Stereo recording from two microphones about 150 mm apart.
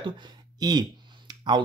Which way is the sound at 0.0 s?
30° right (ahead or behind).